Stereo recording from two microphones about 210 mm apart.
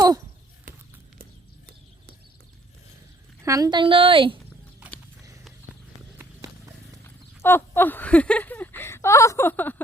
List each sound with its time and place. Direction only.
3.4 s a woman's voice: 15° right (ahead or behind)
6.1 s run: 15° right (ahead or behind)
7.4 s speech: 10° left (ahead or behind)